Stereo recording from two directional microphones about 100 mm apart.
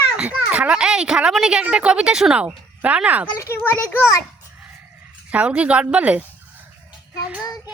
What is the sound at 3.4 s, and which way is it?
Speech, 25° left (ahead or behind).